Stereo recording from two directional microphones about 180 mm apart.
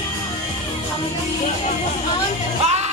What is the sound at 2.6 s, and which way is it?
Music, 40° right (ahead or behind).